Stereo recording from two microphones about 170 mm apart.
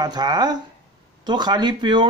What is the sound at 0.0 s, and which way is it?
Speech, 25° right (ahead or behind).